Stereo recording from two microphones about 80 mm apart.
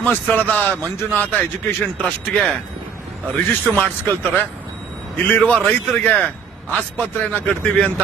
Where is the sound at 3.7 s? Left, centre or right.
Left.